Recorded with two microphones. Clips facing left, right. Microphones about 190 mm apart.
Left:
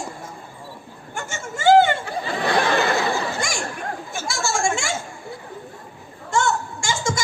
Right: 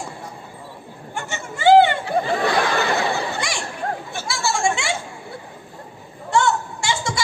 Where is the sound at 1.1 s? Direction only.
45° left (ahead or behind).